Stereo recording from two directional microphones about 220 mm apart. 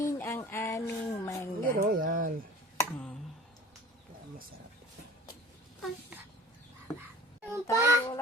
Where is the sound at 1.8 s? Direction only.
40° right (ahead or behind).